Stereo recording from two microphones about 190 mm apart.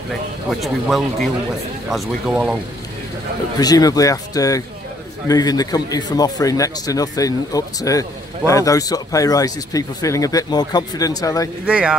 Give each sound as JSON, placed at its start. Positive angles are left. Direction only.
{"t": 0.5, "sound": "speech", "side_deg": 0}
{"t": 3.5, "sound": "a man's voice", "side_deg": 20}
{"t": 11.6, "sound": "speech", "side_deg": -5}